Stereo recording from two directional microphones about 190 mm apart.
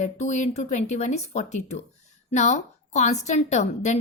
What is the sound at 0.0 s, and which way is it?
A woman's voice, 40° left (ahead or behind).